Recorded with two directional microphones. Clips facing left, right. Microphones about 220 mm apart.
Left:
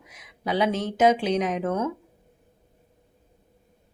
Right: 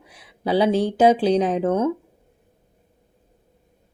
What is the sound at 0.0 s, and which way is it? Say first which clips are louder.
Speech: right 5 dB; 30° right (ahead or behind).